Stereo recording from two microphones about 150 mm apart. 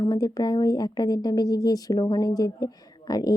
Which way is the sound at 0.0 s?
25° left (ahead or behind).